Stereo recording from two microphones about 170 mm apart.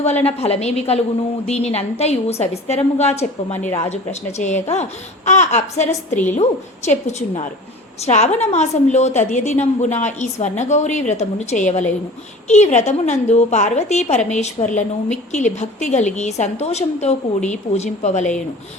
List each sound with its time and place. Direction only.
0.0 s speech: 35° left (ahead or behind)
3.5 s speech: 10° left (ahead or behind)
3.8 s speech: 40° left (ahead or behind)
6.1 s speech: 10° left (ahead or behind)
6.3 s a woman's voice: 40° left (ahead or behind)